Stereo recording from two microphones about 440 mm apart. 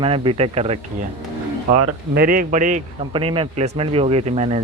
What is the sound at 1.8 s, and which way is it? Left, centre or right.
A man's voice, right.